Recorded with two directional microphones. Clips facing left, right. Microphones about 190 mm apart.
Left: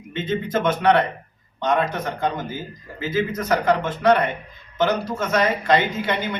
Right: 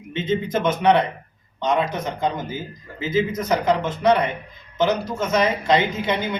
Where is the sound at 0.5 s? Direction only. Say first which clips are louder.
Even; 20° right (ahead or behind).